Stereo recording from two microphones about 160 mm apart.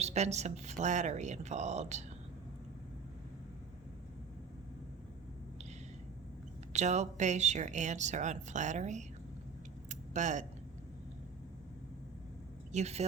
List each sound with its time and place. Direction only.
0.0 s a woman's voice: 45° right (ahead or behind)
6.7 s a woman's voice: 45° right (ahead or behind)
9.9 s a sound: 50° right (ahead or behind)
12.7 s a woman's voice: 40° right (ahead or behind)